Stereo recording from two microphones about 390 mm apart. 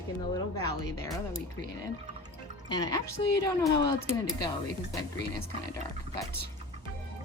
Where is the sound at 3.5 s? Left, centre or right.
Centre.